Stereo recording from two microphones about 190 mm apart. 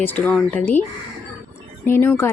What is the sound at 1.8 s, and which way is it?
Speech, 10° left (ahead or behind).